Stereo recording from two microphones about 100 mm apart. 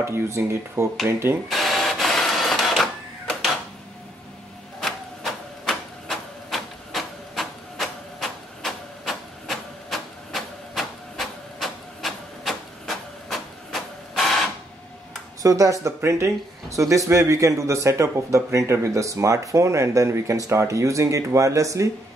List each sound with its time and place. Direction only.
0.0 s speech: 30° right (ahead or behind)
1.5 s printer: centre (ahead or behind)
4.7 s a sound: 5° left (ahead or behind)
15.4 s speech: 35° right (ahead or behind)